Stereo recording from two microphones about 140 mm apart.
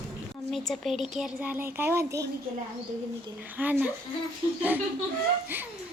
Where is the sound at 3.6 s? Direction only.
10° right (ahead or behind).